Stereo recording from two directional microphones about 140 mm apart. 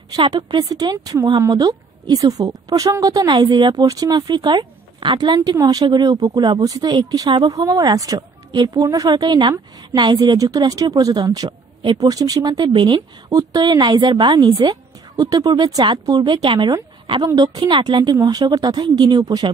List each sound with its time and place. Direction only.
0.1 s a woman's voice: 30° right (ahead or behind)